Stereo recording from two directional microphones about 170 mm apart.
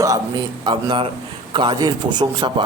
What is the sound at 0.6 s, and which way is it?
A man's voice, 30° right (ahead or behind).